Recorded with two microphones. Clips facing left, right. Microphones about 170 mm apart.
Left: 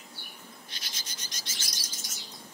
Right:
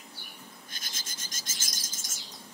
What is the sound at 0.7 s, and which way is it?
Bird, 50° right (ahead or behind).